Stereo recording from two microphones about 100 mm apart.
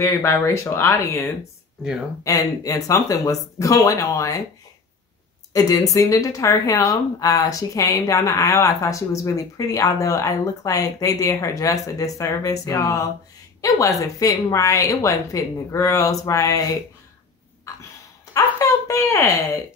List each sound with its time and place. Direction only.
0.0 s speech: 25° left (ahead or behind)
2.2 s speech: 35° left (ahead or behind)
5.5 s speech: 35° left (ahead or behind)
17.7 s a sound: 35° left (ahead or behind)